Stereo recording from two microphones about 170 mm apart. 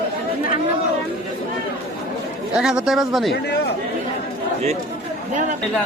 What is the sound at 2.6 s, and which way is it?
Speech, 5° right (ahead or behind).